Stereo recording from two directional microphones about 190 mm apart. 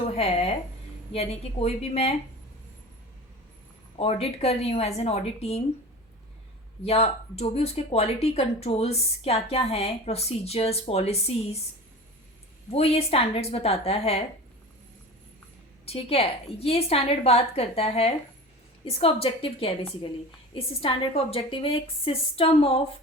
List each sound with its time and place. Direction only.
0.0 s a sound: 30° left (ahead or behind)
1.1 s speech: 30° left (ahead or behind)
3.9 s speech: 30° left (ahead or behind)
6.8 s speech: 35° left (ahead or behind)
12.7 s speech: 30° left (ahead or behind)
15.9 s a woman's voice: 30° left (ahead or behind)